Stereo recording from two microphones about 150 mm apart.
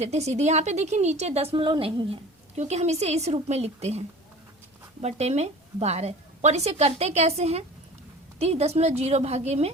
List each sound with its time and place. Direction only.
0.0 s a woman's voice: 45° right (ahead or behind)
2.6 s a woman's voice: 50° right (ahead or behind)